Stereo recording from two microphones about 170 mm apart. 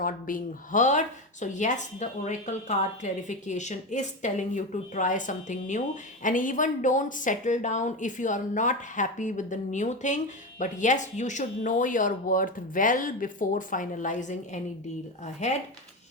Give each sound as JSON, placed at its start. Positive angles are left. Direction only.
{"t": 0.0, "sound": "speech", "side_deg": 55}